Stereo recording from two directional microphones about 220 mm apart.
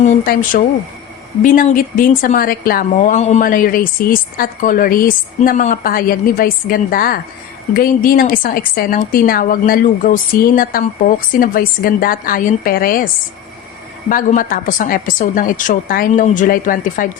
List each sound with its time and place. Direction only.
0.0 s a woman's voice: 40° left (ahead or behind)
14.1 s a woman's voice: 40° left (ahead or behind)